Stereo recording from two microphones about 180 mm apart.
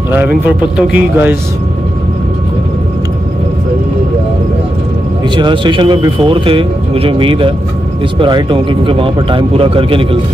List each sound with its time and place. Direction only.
0.7 s a man's voice: 10° right (ahead or behind)
5.3 s speech: 25° right (ahead or behind)